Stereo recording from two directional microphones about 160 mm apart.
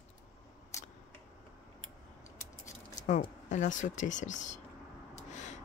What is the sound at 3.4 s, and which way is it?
Speech, 50° left (ahead or behind).